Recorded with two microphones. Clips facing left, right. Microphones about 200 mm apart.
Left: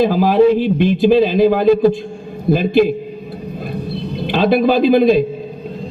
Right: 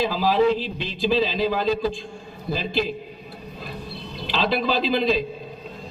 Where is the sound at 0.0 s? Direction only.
55° left (ahead or behind).